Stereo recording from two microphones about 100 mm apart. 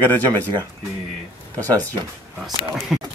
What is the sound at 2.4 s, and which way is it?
Speech, centre (ahead or behind).